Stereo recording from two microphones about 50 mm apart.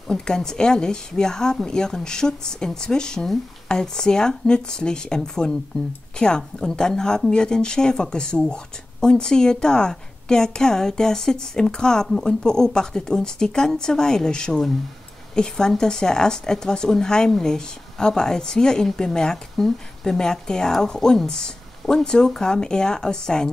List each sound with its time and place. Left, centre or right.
0.1 s a woman's voice: centre